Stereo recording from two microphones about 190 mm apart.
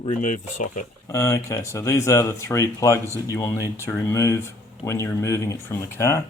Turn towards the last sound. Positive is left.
turn(degrees=15)  # may be behind; listen again after turning